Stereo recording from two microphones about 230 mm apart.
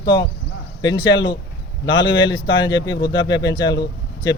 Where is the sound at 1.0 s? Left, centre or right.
Left.